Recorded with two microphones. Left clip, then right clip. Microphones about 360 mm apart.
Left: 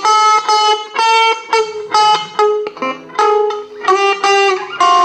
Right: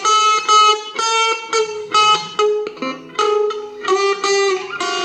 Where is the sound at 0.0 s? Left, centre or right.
Centre.